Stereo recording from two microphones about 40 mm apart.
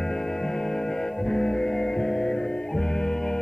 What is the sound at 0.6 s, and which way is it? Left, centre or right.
Music, centre.